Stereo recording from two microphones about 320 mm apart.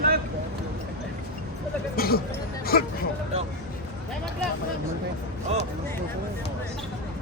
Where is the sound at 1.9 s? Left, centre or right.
Left.